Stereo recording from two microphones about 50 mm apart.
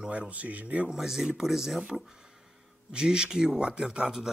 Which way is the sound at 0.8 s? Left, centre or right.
Centre.